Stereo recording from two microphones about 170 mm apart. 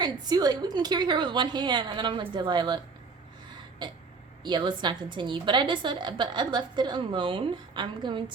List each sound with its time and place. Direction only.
0.0 s a woman's voice: 25° right (ahead or behind)